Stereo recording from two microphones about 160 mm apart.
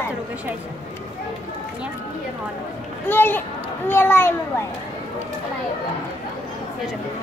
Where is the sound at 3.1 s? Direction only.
15° left (ahead or behind).